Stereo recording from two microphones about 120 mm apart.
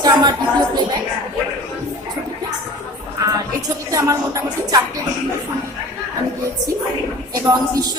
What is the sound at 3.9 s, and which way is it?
Speech, 30° right (ahead or behind).